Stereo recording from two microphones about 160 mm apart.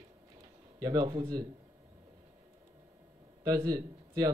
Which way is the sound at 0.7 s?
25° right (ahead or behind).